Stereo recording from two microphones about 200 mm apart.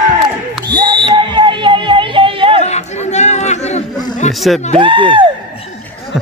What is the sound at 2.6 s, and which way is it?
Chatter, 35° left (ahead or behind).